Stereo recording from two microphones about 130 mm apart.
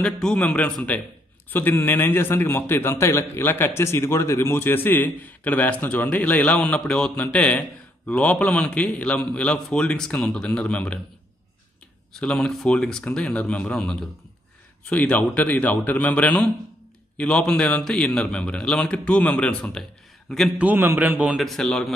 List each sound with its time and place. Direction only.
0.0 s a man's voice: 5° left (ahead or behind)
12.1 s a man's voice: 5° left (ahead or behind)
20.5 s a man's voice: 15° right (ahead or behind); by 21.9 s 5° left (ahead or behind)